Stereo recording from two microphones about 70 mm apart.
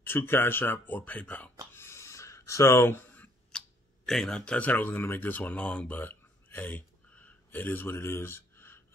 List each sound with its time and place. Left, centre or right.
0.0 s speech: left
1.7 s a sound: left
3.5 s speech: centre; by 8.8 s left